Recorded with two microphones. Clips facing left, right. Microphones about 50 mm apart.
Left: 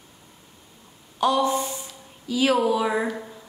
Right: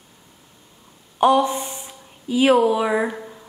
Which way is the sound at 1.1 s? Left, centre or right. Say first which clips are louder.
Right 4 dB; right.